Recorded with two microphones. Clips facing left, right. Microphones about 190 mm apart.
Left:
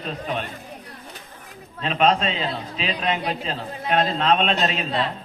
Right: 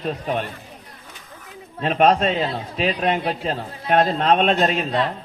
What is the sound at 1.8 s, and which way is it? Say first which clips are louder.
A man's voice: right 3 dB; 50° right (ahead or behind).